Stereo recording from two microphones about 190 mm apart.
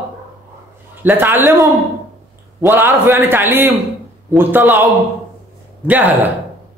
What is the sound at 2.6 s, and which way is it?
A man's voice, 10° right (ahead or behind).